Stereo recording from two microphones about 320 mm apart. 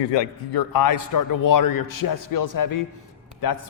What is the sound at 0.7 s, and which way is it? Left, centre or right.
A man's voice, left.